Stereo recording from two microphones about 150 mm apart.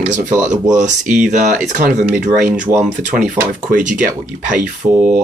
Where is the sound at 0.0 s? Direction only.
55° right (ahead or behind).